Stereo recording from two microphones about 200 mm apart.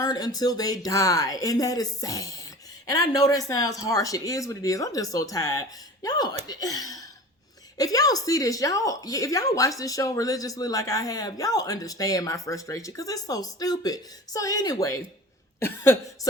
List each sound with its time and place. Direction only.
0.0 s speech: 20° left (ahead or behind)